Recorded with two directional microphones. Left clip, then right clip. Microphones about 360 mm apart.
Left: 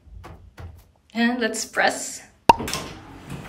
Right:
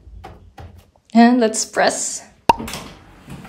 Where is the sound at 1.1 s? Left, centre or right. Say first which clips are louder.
Right 9 dB; centre.